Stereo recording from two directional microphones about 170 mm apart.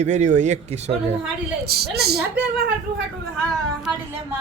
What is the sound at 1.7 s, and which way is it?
Speech, 70° right (ahead or behind).